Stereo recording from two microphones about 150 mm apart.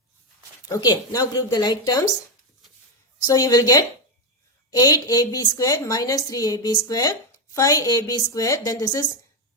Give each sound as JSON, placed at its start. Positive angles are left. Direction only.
{"t": 0.7, "sound": "a woman's voice", "side_deg": 25}
{"t": 3.3, "sound": "a woman's voice", "side_deg": 25}